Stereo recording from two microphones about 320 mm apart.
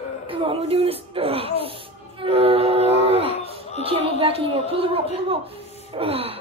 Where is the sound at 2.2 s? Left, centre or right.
Centre.